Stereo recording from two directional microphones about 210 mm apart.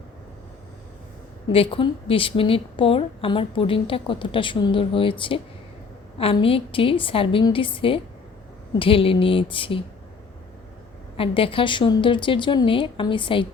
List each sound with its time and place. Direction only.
1.5 s a woman's voice: 25° left (ahead or behind)
11.2 s a woman's voice: 25° left (ahead or behind)